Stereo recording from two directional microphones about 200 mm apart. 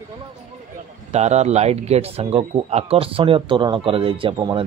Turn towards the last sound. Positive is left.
turn(degrees=-25)  # may be behind; listen again after turning